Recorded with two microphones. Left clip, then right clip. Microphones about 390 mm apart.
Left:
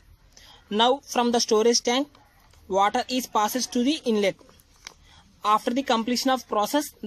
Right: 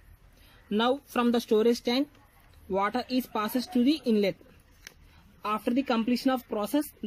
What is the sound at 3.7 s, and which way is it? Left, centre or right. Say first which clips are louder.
Speech: left 2 dB; left.